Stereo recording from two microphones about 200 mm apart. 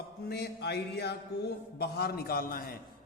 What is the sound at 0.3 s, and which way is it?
A man's voice, 55° left (ahead or behind).